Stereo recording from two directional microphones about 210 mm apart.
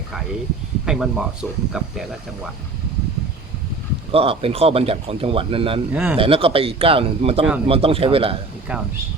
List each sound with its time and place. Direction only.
0.9 s speech: centre (ahead or behind)
4.1 s speech: 25° right (ahead or behind)
5.9 s speech: 5° right (ahead or behind)
6.1 s speech: 25° right (ahead or behind)